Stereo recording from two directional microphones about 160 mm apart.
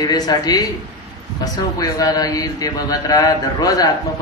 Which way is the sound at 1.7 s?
20° left (ahead or behind).